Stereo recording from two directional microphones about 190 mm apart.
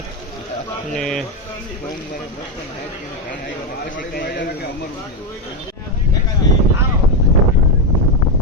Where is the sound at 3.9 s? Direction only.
55° left (ahead or behind).